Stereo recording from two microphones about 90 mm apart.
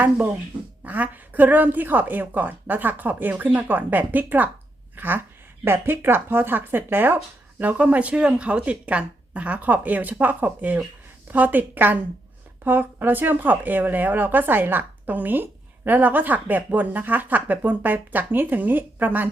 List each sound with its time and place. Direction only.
0.9 s speech: 20° right (ahead or behind)